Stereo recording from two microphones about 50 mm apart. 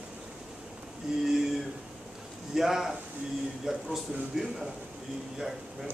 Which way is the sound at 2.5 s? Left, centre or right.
Centre.